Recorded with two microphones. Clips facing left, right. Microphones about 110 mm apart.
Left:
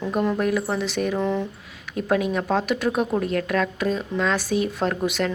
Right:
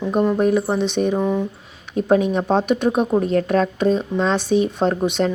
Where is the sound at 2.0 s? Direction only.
25° right (ahead or behind).